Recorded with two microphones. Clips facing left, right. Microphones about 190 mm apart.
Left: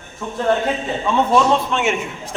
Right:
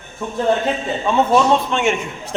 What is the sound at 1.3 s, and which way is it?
Speech, 5° left (ahead or behind).